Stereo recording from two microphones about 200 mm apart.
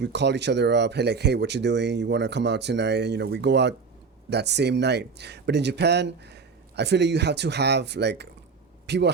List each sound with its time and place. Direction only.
0.0 s speech: 60° right (ahead or behind)